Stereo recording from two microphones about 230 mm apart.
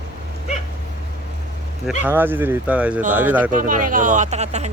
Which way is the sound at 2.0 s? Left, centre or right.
Centre.